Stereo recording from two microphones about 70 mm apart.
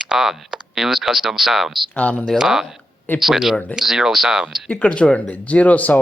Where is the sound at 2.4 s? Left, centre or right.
Centre.